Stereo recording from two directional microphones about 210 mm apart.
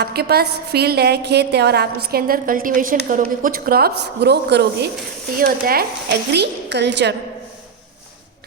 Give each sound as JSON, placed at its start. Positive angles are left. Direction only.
{"t": 0.0, "sound": "a woman's voice", "side_deg": -50}